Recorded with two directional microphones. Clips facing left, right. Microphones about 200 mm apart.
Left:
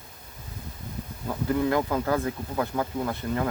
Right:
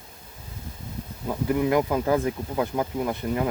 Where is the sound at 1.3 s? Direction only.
15° right (ahead or behind).